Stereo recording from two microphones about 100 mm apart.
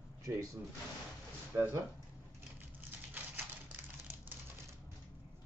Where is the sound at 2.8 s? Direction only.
20° right (ahead or behind).